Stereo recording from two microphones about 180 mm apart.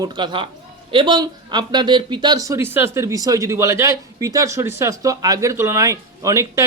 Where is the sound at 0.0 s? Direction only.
25° right (ahead or behind).